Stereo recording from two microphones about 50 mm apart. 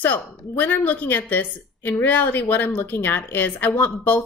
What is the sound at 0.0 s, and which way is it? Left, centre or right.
A woman's voice, left.